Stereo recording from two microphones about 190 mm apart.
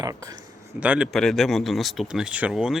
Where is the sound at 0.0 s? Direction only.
20° right (ahead or behind).